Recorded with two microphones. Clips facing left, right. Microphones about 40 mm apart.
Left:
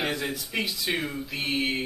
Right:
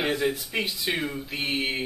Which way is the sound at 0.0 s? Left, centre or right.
Centre.